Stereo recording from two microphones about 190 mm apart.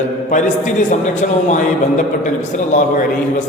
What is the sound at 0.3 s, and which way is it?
A man's voice, 40° left (ahead or behind).